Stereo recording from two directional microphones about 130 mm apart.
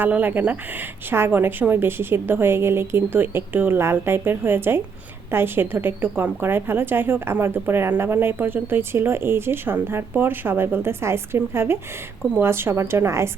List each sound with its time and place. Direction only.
0.0 s a woman's voice: 15° right (ahead or behind)